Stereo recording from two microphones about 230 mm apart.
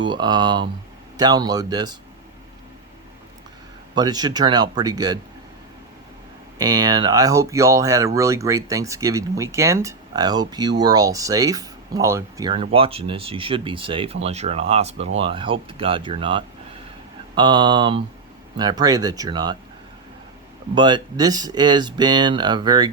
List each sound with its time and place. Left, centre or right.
0.0 s speech: centre
3.9 s speech: centre
6.6 s speech: centre
20.7 s speech: centre